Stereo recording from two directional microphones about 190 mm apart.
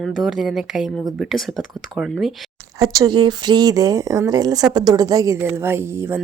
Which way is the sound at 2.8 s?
20° right (ahead or behind).